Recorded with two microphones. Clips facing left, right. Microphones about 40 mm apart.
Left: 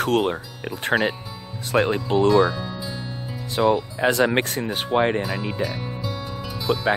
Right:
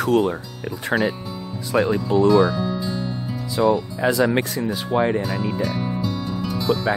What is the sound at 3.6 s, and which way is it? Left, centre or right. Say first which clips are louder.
Speech: right 1 dB; left.